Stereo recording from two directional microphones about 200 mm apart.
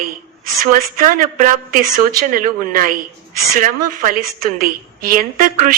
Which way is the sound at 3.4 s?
45° right (ahead or behind).